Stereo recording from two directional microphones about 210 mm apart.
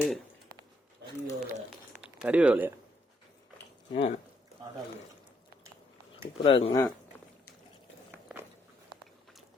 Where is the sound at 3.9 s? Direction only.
25° left (ahead or behind).